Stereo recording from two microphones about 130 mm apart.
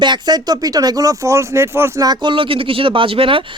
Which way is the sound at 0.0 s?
35° right (ahead or behind).